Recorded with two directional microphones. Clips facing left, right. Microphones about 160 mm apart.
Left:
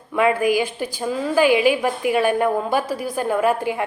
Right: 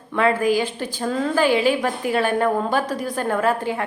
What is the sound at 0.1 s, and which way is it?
A woman's voice, 15° left (ahead or behind).